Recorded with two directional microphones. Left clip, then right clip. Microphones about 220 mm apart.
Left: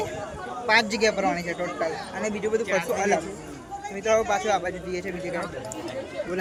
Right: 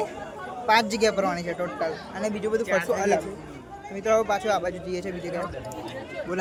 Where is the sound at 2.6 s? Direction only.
30° right (ahead or behind).